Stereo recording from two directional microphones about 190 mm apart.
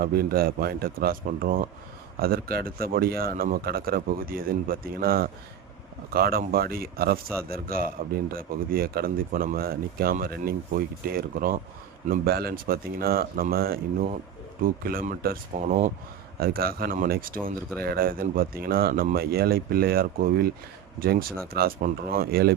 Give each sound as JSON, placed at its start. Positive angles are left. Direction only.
{"t": 0.0, "sound": "speech", "side_deg": -50}